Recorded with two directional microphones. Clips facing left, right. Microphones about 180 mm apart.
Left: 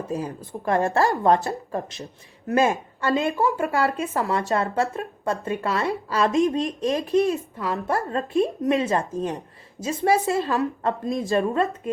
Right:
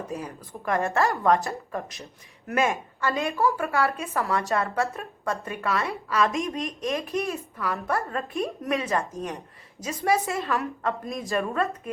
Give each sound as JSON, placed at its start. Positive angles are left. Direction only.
{"t": 0.1, "sound": "a woman's voice", "side_deg": 30}